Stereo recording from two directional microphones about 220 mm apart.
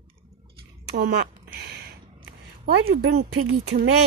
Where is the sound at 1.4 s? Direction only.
45° right (ahead or behind).